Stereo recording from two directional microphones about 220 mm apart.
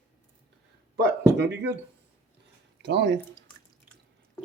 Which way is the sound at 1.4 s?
50° right (ahead or behind).